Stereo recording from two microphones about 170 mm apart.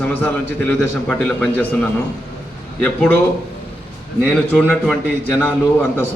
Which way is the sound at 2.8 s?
10° left (ahead or behind).